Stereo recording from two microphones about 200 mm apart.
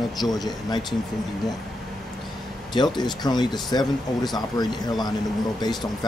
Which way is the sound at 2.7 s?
20° left (ahead or behind).